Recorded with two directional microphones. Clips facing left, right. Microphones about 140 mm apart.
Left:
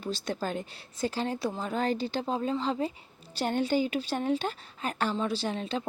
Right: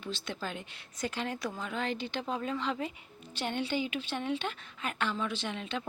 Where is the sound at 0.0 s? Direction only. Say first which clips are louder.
Left 6 dB; 40° left (ahead or behind).